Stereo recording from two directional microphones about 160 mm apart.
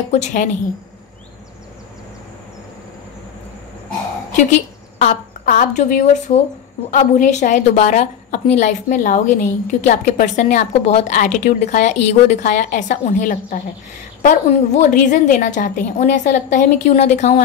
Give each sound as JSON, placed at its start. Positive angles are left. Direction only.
{"t": 0.1, "sound": "a woman's voice", "side_deg": 50}
{"t": 4.9, "sound": "a woman's voice", "side_deg": 50}
{"t": 11.1, "sound": "a woman's voice", "side_deg": 55}